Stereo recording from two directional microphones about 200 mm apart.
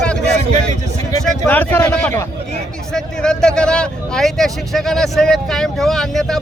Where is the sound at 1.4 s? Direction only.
10° left (ahead or behind).